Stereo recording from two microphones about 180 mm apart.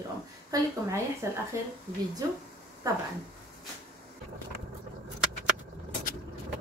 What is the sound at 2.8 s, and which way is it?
Speech, 20° right (ahead or behind).